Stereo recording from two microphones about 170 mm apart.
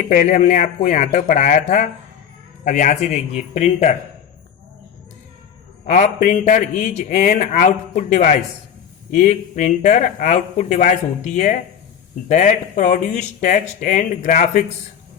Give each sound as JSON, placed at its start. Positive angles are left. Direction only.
{"t": 0.1, "sound": "a man's voice", "side_deg": 50}
{"t": 5.8, "sound": "a man's voice", "side_deg": 45}